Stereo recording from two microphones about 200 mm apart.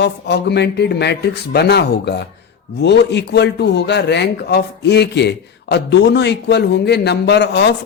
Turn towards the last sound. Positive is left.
turn(degrees=55)  # may be behind; listen again after turning